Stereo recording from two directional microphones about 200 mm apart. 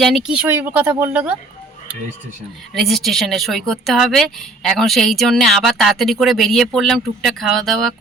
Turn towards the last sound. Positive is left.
turn(degrees=0)  # may be behind; listen again after turning